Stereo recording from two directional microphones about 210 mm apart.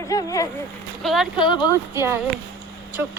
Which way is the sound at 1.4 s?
20° left (ahead or behind).